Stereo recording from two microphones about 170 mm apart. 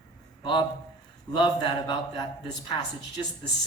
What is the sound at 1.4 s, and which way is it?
A man's voice, 25° left (ahead or behind).